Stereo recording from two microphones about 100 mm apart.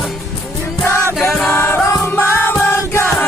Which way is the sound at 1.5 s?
25° left (ahead or behind).